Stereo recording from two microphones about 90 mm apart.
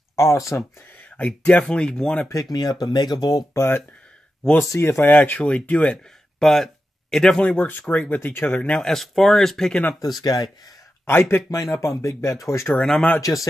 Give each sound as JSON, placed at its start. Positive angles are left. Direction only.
{"t": 0.1, "sound": "speech", "side_deg": 35}
{"t": 1.1, "sound": "speech", "side_deg": 15}
{"t": 2.5, "sound": "speech", "side_deg": 50}
{"t": 3.5, "sound": "speech", "side_deg": 25}
{"t": 10.0, "sound": "speech", "side_deg": 45}
{"t": 11.1, "sound": "speech", "side_deg": 25}
{"t": 11.5, "sound": "speech", "side_deg": 40}